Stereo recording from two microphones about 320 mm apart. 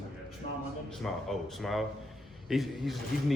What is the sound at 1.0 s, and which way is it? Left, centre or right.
Speech, centre.